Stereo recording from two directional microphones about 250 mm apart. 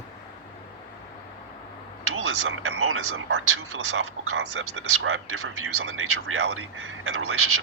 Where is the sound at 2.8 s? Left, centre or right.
Right.